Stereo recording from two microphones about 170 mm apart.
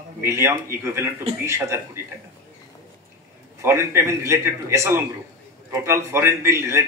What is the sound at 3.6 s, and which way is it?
A man's voice, 15° right (ahead or behind).